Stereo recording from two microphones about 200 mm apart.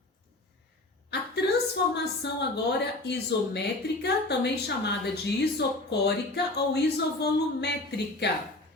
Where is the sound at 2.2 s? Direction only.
60° left (ahead or behind).